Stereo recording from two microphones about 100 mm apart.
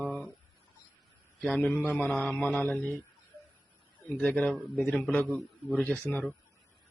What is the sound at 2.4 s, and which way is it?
Speech, 15° left (ahead or behind).